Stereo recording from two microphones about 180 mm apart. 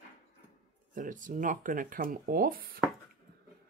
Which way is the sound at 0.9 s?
45° right (ahead or behind).